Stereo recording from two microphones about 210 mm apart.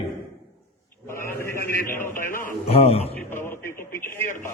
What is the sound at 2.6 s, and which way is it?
Speech, 30° left (ahead or behind).